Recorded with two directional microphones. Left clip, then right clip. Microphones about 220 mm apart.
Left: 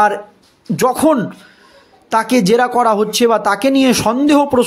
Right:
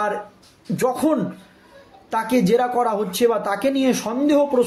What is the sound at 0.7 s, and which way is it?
Speech, 40° left (ahead or behind).